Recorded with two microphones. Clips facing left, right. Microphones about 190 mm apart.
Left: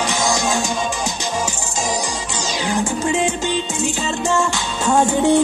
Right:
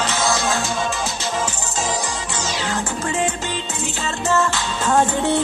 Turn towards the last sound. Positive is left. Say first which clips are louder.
# left 3 dB
turn(degrees=15)  # may be behind; listen again after turning